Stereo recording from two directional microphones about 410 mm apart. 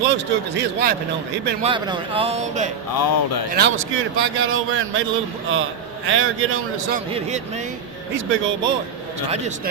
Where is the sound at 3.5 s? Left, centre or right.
Right.